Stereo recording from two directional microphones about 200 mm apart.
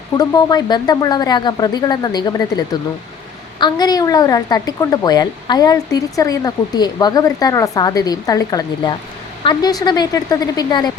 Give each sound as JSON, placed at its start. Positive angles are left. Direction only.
{"t": 0.2, "sound": "a woman's voice", "side_deg": 20}